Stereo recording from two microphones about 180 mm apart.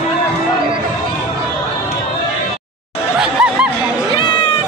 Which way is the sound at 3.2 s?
5° right (ahead or behind).